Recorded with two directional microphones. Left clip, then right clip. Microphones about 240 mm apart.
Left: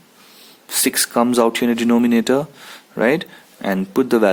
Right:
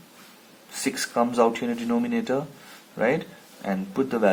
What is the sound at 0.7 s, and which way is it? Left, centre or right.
Speech, left.